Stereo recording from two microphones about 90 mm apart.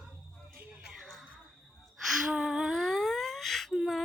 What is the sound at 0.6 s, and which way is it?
Music, 15° right (ahead or behind).